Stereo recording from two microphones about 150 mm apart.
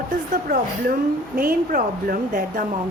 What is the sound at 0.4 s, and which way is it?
Speech, 80° right.